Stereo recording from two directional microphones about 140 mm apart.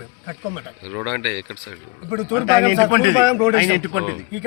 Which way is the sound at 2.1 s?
20° right (ahead or behind).